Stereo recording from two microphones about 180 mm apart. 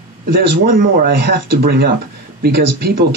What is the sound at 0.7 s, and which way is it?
Speech, 50° right (ahead or behind).